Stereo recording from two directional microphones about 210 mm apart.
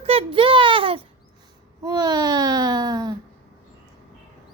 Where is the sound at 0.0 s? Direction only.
30° right (ahead or behind).